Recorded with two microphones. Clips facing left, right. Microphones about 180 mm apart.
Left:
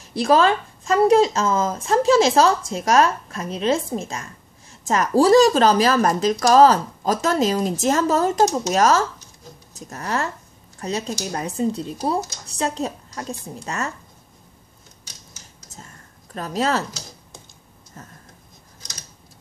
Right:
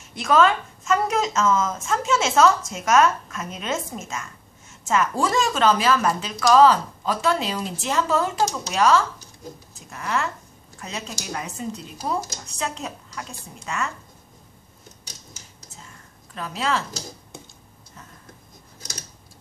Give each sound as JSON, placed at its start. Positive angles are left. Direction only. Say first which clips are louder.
{"t": 0.0, "sound": "speech", "louder": "left 2 dB", "side_deg": 35}
{"t": 16.3, "sound": "speech", "louder": "left 4 dB", "side_deg": 40}